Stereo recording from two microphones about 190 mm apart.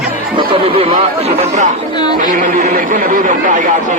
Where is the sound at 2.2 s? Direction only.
45° right (ahead or behind).